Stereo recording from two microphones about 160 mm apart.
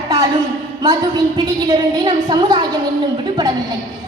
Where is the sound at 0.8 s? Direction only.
25° right (ahead or behind).